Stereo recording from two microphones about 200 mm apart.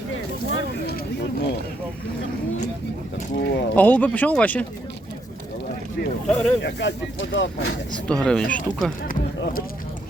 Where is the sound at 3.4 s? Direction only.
55° left (ahead or behind).